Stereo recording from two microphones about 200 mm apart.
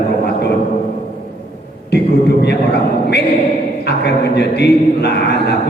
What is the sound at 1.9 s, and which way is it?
Speech, 55° left (ahead or behind).